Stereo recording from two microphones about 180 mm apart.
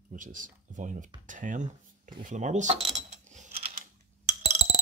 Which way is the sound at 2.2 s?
45° right (ahead or behind).